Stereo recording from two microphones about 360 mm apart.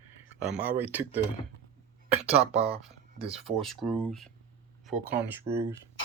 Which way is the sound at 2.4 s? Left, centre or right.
Centre.